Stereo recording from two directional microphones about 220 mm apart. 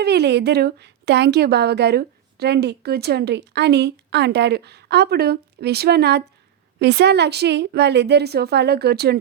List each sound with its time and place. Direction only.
0.0 s a woman's voice: 50° right (ahead or behind)